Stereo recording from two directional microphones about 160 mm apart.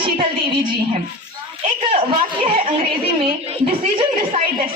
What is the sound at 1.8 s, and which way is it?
Speech, 35° right (ahead or behind).